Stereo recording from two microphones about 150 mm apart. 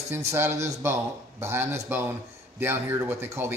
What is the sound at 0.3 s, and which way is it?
Speech, 15° right (ahead or behind).